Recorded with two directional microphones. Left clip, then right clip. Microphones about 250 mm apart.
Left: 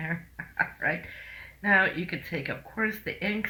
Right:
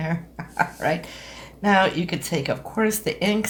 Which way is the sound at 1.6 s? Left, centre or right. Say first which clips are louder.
Right 4 dB; right.